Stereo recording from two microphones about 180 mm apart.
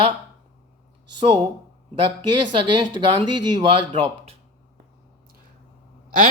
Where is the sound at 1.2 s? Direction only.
30° right (ahead or behind).